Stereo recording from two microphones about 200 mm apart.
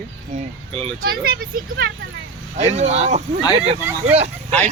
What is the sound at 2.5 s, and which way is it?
Speech, 35° right (ahead or behind).